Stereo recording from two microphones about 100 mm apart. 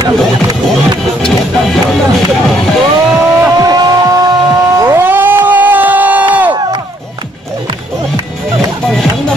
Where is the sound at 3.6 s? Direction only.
40° right (ahead or behind).